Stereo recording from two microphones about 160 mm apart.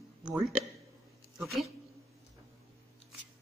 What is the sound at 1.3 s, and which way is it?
Speech, centre (ahead or behind).